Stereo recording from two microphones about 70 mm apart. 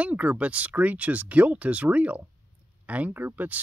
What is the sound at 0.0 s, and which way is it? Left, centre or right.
Speech, centre.